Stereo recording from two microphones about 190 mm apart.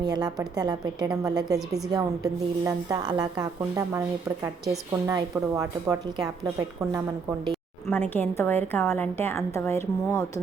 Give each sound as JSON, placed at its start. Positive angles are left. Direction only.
{"t": 0.0, "sound": "a woman's voice", "side_deg": -20}
{"t": 7.5, "sound": "a sound", "side_deg": 10}
{"t": 8.1, "sound": "a woman's voice", "side_deg": 10}